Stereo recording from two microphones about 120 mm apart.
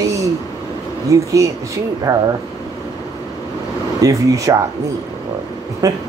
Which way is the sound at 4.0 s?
30° right (ahead or behind).